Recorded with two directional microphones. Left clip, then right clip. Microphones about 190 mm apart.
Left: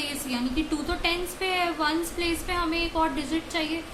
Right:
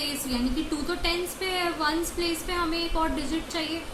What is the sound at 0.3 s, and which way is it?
A woman's voice, 20° left (ahead or behind).